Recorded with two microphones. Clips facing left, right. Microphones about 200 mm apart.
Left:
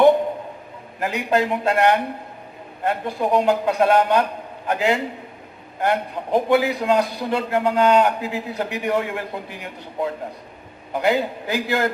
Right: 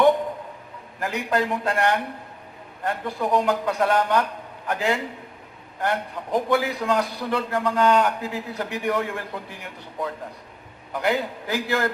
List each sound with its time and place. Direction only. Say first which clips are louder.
0.9 s a man's voice: left 3 dB; 20° left (ahead or behind)